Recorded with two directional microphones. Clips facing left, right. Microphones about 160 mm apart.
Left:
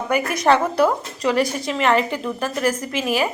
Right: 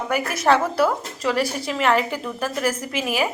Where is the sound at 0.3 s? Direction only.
5° right (ahead or behind).